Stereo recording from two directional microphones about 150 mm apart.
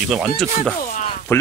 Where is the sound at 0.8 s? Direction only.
55° left (ahead or behind).